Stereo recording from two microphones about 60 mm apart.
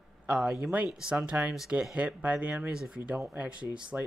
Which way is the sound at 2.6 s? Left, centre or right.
Centre.